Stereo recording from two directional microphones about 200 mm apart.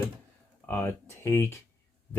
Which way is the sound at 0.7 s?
10° left (ahead or behind).